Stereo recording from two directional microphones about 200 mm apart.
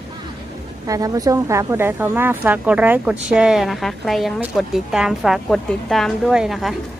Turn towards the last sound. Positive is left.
turn(degrees=0)  # may be behind; listen again after turning